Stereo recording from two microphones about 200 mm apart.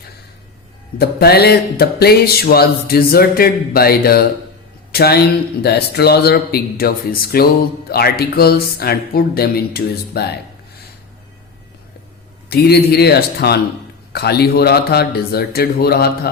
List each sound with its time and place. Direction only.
0.9 s music: 50° left (ahead or behind)
4.9 s a man's voice: 50° left (ahead or behind)
5.6 s music: 55° left (ahead or behind)
12.5 s music: 50° left (ahead or behind)